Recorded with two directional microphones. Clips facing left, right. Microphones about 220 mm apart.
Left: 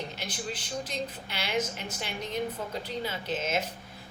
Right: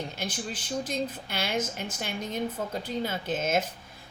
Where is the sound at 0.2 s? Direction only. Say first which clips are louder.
Right 2 dB; 45° right (ahead or behind).